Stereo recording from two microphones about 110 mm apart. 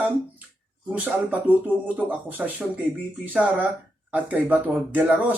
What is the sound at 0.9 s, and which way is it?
Speech, 10° right (ahead or behind).